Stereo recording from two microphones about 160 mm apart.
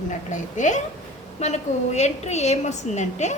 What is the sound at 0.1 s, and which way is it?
A woman's voice, 50° left (ahead or behind).